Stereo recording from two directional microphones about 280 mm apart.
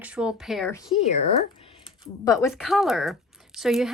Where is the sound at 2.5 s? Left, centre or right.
Centre.